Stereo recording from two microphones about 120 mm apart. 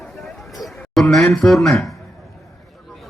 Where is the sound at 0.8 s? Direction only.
5° left (ahead or behind).